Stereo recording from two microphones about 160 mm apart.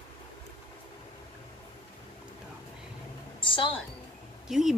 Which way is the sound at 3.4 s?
30° left (ahead or behind).